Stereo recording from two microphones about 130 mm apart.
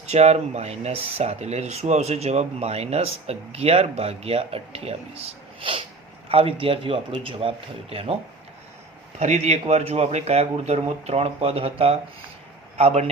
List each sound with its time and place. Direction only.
0.0 s speech: 55° right (ahead or behind)
9.1 s a man's voice: 60° right (ahead or behind)